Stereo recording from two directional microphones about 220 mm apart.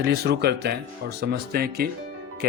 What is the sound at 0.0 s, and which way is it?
Speech, 45° right (ahead or behind).